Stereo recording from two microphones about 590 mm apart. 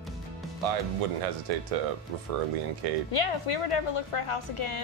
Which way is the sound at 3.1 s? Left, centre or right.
Left.